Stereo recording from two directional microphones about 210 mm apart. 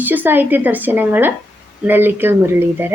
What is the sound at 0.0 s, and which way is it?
A woman's voice, 10° right (ahead or behind).